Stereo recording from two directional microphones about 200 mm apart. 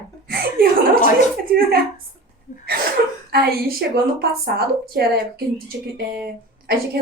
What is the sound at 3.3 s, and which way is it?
Speech, 50° right (ahead or behind).